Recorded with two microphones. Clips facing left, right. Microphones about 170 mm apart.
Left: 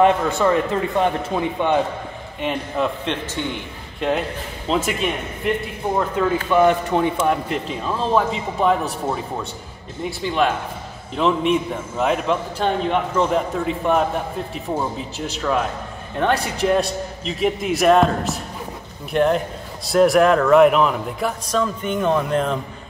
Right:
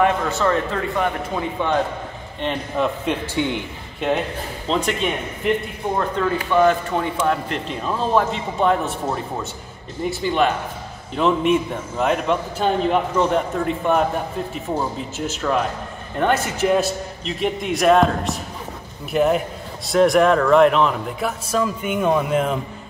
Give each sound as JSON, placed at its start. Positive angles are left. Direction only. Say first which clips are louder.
{"t": 0.0, "sound": "speech", "louder": "left 3 dB", "side_deg": 15}
{"t": 3.1, "sound": "a man's voice", "louder": "right 3 dB", "side_deg": -5}